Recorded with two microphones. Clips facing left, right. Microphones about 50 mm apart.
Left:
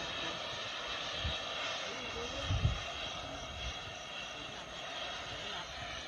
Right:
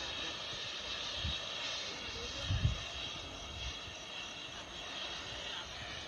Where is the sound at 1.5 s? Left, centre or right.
Left.